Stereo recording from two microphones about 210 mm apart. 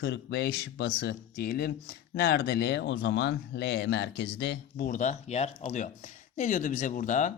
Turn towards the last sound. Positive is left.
turn(degrees=35)  # may be behind; listen again after turning